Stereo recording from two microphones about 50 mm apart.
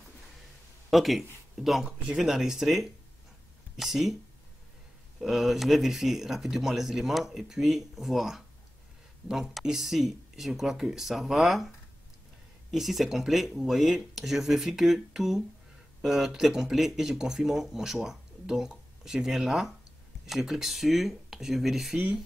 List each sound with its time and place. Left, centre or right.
0.8 s speech: centre
5.2 s speech: centre
12.7 s speech: centre